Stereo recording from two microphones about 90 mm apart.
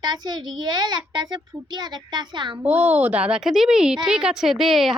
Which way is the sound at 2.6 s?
15° right (ahead or behind).